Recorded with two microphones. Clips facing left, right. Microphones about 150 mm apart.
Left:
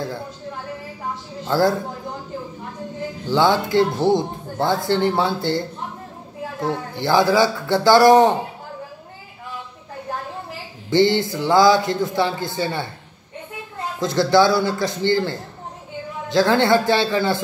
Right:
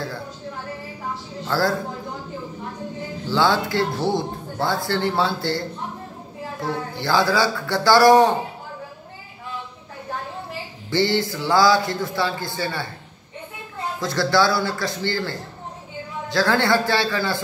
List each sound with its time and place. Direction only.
1.5 s speech: 20° left (ahead or behind)
3.3 s speech: 20° left (ahead or behind)
6.6 s speech: 20° left (ahead or behind)
10.9 s speech: 20° left (ahead or behind)
13.9 s speech: 20° left (ahead or behind)